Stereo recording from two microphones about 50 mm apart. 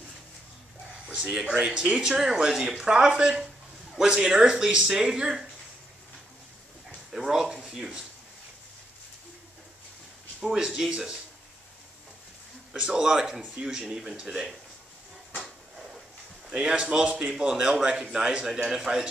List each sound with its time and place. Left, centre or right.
1.0 s speech: centre
7.1 s a sound: centre
10.4 s speech: centre
12.7 s speech: centre
15.3 s a sound: centre
16.4 s speech: centre